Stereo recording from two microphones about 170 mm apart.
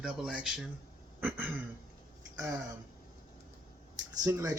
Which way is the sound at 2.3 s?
20° right (ahead or behind).